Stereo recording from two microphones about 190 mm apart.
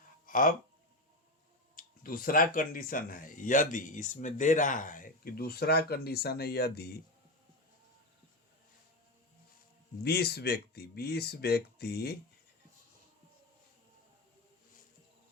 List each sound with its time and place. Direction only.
0.3 s speech: 45° left (ahead or behind)
1.7 s speech: 50° left (ahead or behind)
10.0 s speech: 55° left (ahead or behind)